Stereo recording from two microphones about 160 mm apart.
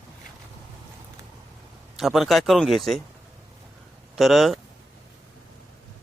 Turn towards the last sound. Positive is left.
turn(degrees=0)  # may be behind; listen again after turning